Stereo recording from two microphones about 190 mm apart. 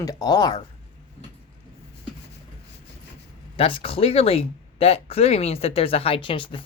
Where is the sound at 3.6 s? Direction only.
30° left (ahead or behind).